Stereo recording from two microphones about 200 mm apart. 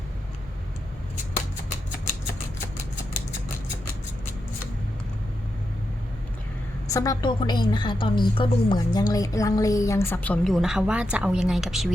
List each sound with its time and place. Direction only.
6.9 s a woman's voice: 15° left (ahead or behind); by 11.9 s centre (ahead or behind)